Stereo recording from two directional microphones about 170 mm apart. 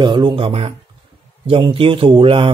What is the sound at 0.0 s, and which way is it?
Speech, 30° right (ahead or behind).